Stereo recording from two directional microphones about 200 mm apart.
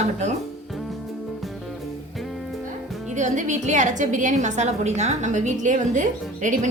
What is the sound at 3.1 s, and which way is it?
A woman's voice, 35° right (ahead or behind).